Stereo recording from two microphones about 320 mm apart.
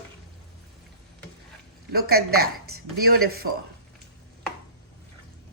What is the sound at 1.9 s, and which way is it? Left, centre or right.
Speech, right.